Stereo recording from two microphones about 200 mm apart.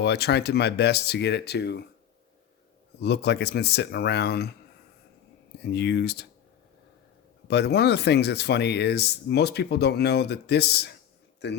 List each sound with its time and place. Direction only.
0.0 s speech: 55° left (ahead or behind)
3.0 s speech: 55° left (ahead or behind)
5.6 s speech: 55° left (ahead or behind)
7.4 s speech: 55° left (ahead or behind)